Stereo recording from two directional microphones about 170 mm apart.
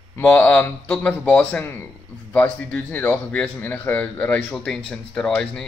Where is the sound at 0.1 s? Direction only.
10° left (ahead or behind).